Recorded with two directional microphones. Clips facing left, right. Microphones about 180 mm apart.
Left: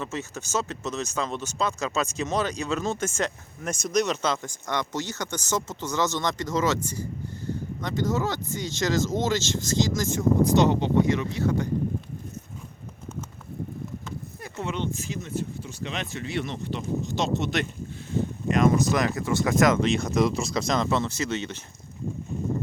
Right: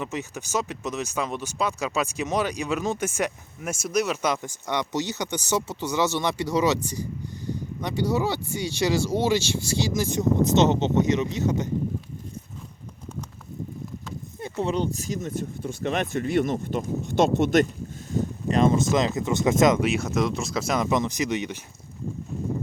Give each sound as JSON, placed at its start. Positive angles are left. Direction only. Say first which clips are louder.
{"t": 0.0, "sound": "speech", "louder": "right 1 dB", "side_deg": -15}
{"t": 7.8, "sound": "speech", "louder": "right 2 dB", "side_deg": -15}
{"t": 14.6, "sound": "speech", "louder": "right 4 dB", "side_deg": -35}
{"t": 18.4, "sound": "speech", "louder": "even", "side_deg": -30}
{"t": 19.8, "sound": "speech", "louder": "left 1 dB", "side_deg": -5}